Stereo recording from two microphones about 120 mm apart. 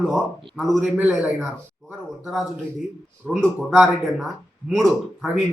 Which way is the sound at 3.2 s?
Centre (ahead or behind).